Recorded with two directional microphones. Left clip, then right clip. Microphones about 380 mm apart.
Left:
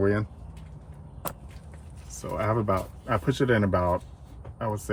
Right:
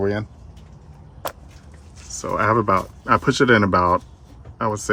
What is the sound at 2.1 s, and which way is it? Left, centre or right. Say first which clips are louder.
Speech: right 9 dB; right.